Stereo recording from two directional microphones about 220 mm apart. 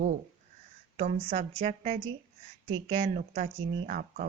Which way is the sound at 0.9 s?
30° right (ahead or behind).